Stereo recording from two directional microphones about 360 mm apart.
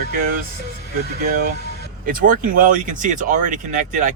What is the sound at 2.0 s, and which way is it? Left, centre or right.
Speech, right.